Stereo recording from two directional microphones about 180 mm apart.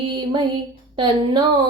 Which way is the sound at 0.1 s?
25° right (ahead or behind).